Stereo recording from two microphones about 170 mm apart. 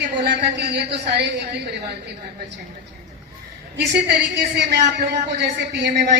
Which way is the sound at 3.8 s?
85° right.